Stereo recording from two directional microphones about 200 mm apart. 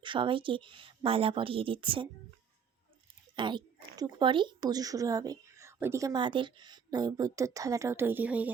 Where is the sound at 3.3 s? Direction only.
25° right (ahead or behind).